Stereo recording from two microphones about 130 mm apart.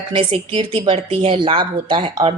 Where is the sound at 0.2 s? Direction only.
40° right (ahead or behind).